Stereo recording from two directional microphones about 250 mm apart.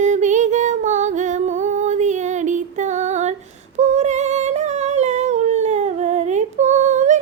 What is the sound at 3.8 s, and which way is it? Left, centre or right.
Humming, right.